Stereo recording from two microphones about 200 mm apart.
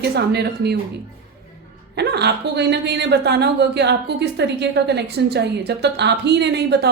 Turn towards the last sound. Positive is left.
turn(degrees=-55)  # may be behind; listen again after turning